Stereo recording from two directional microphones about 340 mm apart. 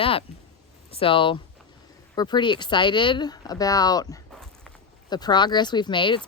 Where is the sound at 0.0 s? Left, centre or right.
Centre.